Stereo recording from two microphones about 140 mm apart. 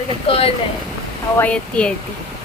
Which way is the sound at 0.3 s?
40° left (ahead or behind).